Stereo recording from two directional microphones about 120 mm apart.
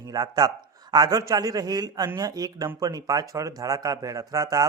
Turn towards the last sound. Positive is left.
turn(degrees=-30)  # may be behind; listen again after turning